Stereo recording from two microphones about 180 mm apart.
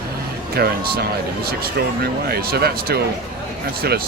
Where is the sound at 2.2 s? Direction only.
60° right (ahead or behind).